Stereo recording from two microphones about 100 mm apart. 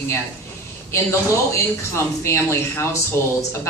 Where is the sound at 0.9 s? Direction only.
30° left (ahead or behind).